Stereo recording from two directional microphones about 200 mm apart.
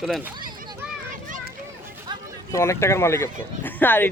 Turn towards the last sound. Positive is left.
turn(degrees=10)  # may be behind; listen again after turning